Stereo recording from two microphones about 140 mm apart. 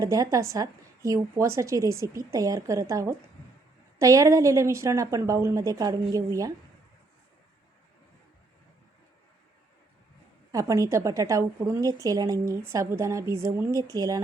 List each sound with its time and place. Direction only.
0.0 s a woman's voice: 25° right (ahead or behind)
10.5 s a woman's voice: 25° right (ahead or behind)